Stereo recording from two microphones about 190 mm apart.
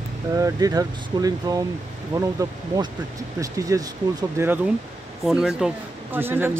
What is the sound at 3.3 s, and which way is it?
Speech, 15° right (ahead or behind).